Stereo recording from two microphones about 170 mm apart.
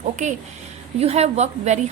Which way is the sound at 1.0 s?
40° right (ahead or behind).